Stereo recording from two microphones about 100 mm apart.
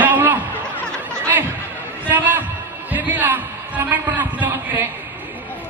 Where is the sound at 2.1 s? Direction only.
15° right (ahead or behind).